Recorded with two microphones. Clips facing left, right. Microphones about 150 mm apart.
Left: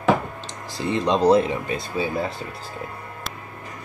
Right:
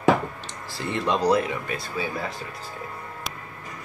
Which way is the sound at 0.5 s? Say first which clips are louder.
Left 5 dB; 20° left (ahead or behind).